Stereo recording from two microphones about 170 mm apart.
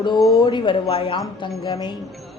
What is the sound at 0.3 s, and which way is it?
Speech, 25° left (ahead or behind).